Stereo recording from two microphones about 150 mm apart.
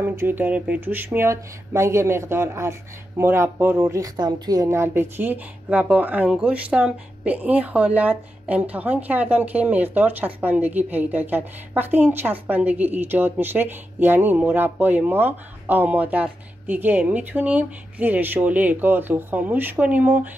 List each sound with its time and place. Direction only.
0.0 s speech: 15° right (ahead or behind)